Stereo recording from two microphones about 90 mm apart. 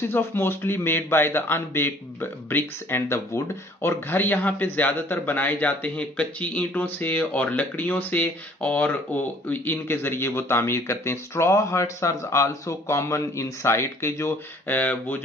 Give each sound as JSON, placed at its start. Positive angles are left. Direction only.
{"t": 0.1, "sound": "speech", "side_deg": 25}